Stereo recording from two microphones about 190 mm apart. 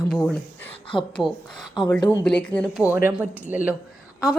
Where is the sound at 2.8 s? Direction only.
10° right (ahead or behind).